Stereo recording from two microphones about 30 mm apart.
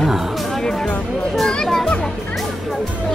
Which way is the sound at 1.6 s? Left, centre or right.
Centre.